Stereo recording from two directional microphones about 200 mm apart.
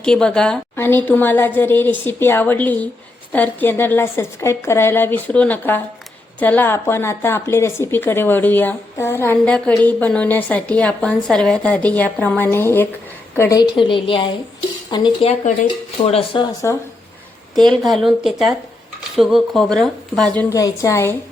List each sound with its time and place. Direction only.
0.0 s a woman's voice: 5° left (ahead or behind); by 16.5 s 30° left (ahead or behind)
17.7 s speech: centre (ahead or behind)